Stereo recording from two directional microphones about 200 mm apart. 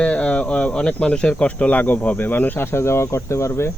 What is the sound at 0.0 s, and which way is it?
Speech, 5° left (ahead or behind).